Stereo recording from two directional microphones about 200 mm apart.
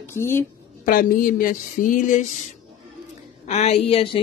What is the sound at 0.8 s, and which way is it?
Speech, 45° left (ahead or behind).